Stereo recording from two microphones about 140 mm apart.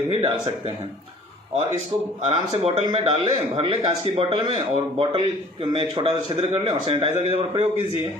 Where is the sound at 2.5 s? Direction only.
40° right (ahead or behind).